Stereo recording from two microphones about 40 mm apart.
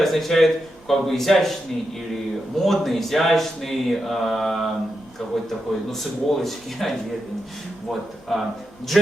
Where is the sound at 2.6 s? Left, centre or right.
Centre.